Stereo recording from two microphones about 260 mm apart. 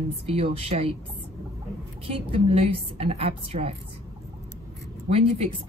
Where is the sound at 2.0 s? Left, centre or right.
Right.